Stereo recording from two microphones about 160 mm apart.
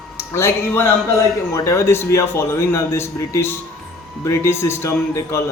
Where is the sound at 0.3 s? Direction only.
15° left (ahead or behind).